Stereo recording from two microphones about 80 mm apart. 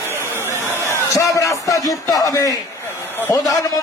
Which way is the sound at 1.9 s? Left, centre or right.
Left.